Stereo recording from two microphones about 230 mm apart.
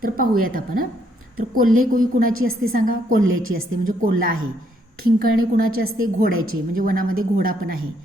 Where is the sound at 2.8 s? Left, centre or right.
Right.